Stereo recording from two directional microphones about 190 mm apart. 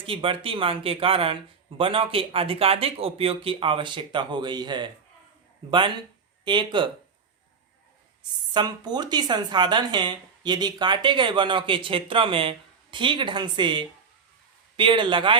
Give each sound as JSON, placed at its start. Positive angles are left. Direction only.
{"t": 0.0, "sound": "speech", "side_deg": -30}
{"t": 6.4, "sound": "speech", "side_deg": -25}
{"t": 8.5, "sound": "speech", "side_deg": -20}